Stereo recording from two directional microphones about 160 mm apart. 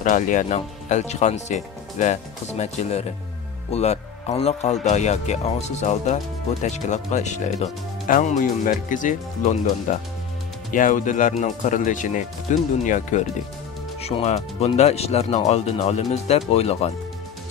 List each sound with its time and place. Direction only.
0.0 s speech: 50° left (ahead or behind)
14.0 s speech: 40° left (ahead or behind)